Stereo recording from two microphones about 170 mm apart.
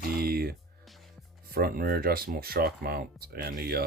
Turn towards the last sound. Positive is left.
turn(degrees=-65)  # may be behind; listen again after turning